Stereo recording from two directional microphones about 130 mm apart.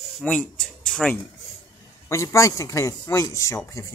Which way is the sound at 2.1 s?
25° left (ahead or behind).